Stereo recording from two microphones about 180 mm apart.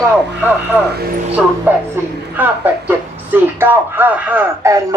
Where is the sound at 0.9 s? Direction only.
55° right (ahead or behind).